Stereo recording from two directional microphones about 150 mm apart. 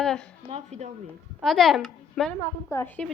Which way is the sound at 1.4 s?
Centre (ahead or behind).